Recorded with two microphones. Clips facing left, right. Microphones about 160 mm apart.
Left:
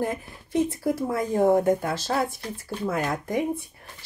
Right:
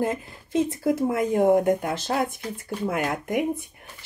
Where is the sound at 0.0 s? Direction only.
25° right (ahead or behind).